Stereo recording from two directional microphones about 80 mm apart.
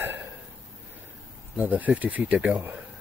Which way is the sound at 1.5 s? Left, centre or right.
Centre.